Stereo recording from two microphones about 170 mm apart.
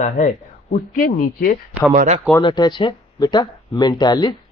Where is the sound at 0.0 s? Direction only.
50° left (ahead or behind).